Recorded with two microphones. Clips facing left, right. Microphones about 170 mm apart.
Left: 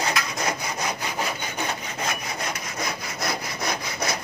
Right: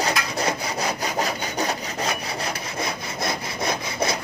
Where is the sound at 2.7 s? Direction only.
25° right (ahead or behind).